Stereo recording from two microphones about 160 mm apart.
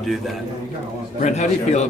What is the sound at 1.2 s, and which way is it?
Speech, 45° left (ahead or behind).